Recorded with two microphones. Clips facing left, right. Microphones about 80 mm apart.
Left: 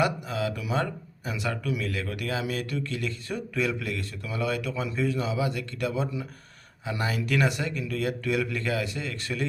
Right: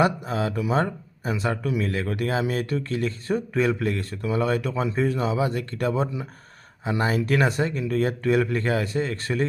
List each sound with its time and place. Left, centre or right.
0.0 s speech: right